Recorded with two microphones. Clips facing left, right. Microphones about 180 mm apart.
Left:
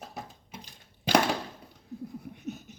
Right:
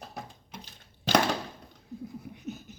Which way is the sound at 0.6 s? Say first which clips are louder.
Left 1 dB; 15° left (ahead or behind).